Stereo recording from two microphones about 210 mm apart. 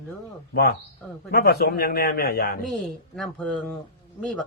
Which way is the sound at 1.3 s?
50° left (ahead or behind).